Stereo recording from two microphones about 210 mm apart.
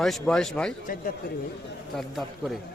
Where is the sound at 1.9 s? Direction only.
Centre (ahead or behind).